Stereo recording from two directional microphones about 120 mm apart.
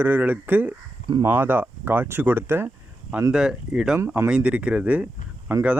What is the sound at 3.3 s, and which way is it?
Speech, 5° right (ahead or behind).